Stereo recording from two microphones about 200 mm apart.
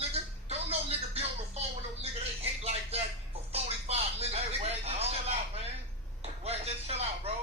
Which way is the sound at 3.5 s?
30° right (ahead or behind).